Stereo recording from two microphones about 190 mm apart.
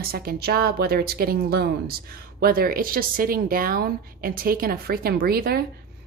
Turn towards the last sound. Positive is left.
turn(degrees=-55)  # may be behind; listen again after turning